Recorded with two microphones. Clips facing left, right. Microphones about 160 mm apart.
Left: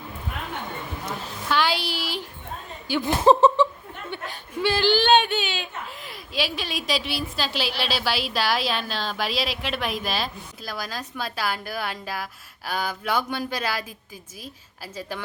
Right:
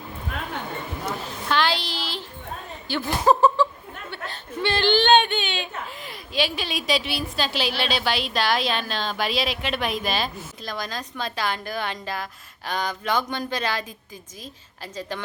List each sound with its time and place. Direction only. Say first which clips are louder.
1.5 s speech: even; 10° left (ahead or behind)
3.2 s laughter: left 2 dB; 25° left (ahead or behind)
4.1 s a woman's voice: left 1 dB; 10° left (ahead or behind)